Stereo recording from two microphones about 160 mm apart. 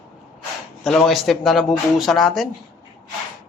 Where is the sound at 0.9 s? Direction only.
Centre (ahead or behind).